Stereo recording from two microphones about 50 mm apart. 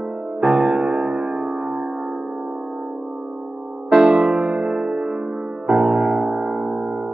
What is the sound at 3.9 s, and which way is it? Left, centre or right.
Music, centre.